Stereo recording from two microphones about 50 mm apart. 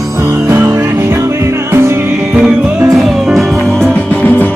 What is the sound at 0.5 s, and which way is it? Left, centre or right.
Music, right.